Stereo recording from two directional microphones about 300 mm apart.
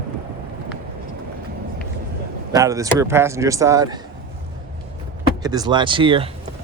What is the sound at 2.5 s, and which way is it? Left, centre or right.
Speech, centre.